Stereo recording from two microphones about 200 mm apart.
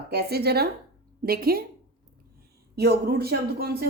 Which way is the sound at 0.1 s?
50° right (ahead or behind).